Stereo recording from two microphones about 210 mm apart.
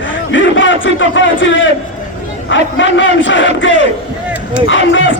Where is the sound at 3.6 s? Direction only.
65° left (ahead or behind).